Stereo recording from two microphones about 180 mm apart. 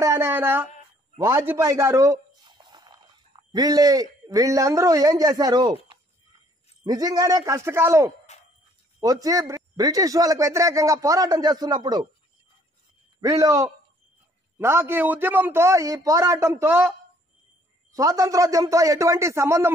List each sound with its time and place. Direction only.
0.0 s speech: 15° right (ahead or behind)
6.8 s a man's voice: 20° right (ahead or behind)
8.3 s a sound: 40° left (ahead or behind)
9.0 s a man's voice: 20° right (ahead or behind)
13.2 s a man's voice: 20° right (ahead or behind)
17.9 s a man's voice: 20° right (ahead or behind)